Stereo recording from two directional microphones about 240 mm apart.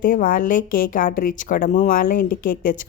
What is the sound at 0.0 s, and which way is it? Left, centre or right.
A woman's voice, left.